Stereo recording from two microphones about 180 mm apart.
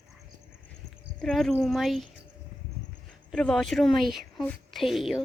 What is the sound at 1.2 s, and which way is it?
Speech, centre (ahead or behind).